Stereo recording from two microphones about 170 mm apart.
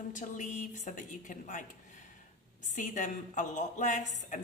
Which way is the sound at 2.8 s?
50° left (ahead or behind).